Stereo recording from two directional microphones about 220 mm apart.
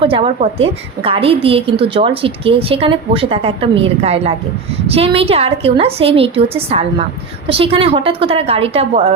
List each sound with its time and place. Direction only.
0.0 s a woman's voice: 25° right (ahead or behind)